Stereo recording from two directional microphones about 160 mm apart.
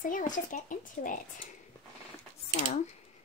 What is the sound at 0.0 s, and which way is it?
Speech, 55° left (ahead or behind).